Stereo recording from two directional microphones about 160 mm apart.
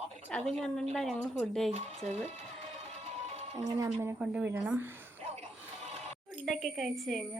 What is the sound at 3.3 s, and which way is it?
Music, 45° right (ahead or behind).